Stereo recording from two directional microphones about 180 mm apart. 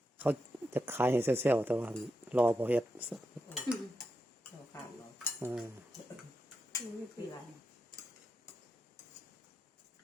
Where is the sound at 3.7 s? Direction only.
25° left (ahead or behind).